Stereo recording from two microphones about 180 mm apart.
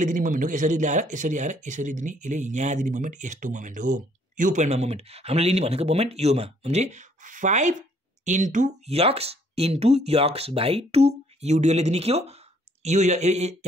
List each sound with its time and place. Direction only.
0.0 s speech: 45° right (ahead or behind)